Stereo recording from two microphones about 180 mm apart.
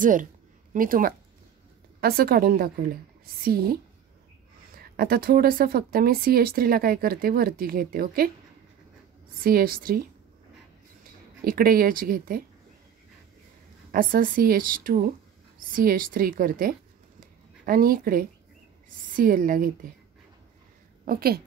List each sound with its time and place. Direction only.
0.0 s speech: 45° right (ahead or behind)
4.9 s speech: 55° right (ahead or behind)
9.4 s speech: 55° right (ahead or behind)
11.4 s speech: 55° right (ahead or behind)
13.9 s speech: 50° right (ahead or behind)
17.2 s a sound: 50° right (ahead or behind)
19.1 s speech: 50° right (ahead or behind)
21.0 s a woman's voice: 55° right (ahead or behind)